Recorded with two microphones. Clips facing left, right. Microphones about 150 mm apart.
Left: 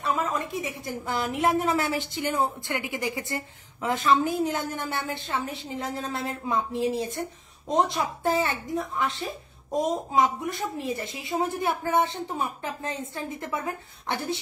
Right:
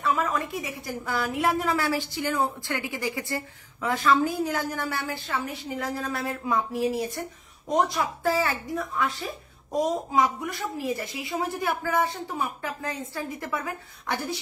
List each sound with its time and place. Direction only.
0.0 s a woman's voice: 20° left (ahead or behind)